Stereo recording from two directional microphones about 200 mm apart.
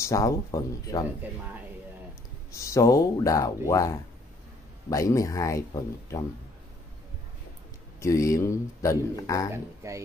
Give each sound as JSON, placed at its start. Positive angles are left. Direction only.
{"t": 0.0, "sound": "speech", "side_deg": 15}
{"t": 2.5, "sound": "speech", "side_deg": 15}
{"t": 8.0, "sound": "speech", "side_deg": 15}
{"t": 9.8, "sound": "speech", "side_deg": -15}